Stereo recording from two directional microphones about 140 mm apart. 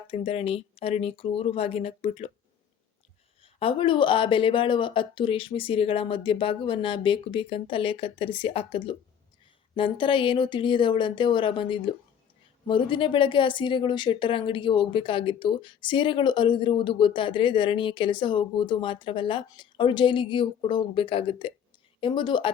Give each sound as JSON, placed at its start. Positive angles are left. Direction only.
{"t": 0.1, "sound": "speech", "side_deg": 45}
{"t": 3.4, "sound": "a woman's voice", "side_deg": 40}